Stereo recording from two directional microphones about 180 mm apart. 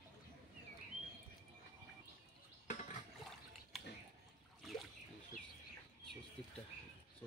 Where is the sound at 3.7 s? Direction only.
Centre (ahead or behind).